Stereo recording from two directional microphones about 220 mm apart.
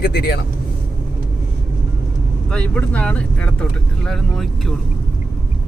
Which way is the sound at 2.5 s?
5° left (ahead or behind).